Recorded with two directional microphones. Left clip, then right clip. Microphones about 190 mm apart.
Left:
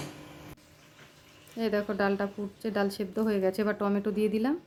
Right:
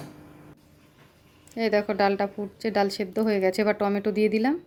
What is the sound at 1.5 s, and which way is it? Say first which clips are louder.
A woman's voice: right 6 dB; 10° right (ahead or behind).